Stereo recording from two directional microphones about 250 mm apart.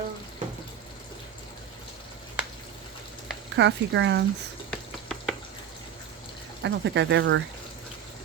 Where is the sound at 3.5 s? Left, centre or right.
Right.